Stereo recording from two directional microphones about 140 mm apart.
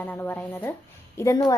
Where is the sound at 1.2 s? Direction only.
25° left (ahead or behind).